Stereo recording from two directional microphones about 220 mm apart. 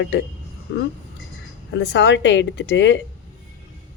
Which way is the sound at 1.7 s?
50° left (ahead or behind).